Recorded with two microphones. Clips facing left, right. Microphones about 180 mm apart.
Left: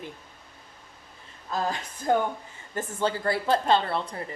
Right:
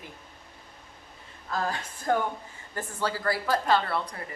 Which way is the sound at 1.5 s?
20° left (ahead or behind).